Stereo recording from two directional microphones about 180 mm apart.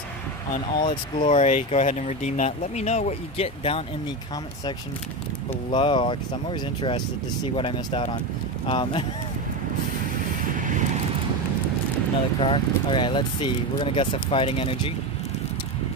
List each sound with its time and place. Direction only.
0.5 s speech: 25° left (ahead or behind)
1.2 s speech: 45° left (ahead or behind)
5.7 s speech: 30° left (ahead or behind)
10.5 s vehicle: 45° right (ahead or behind)
12.4 s speech: 30° left (ahead or behind)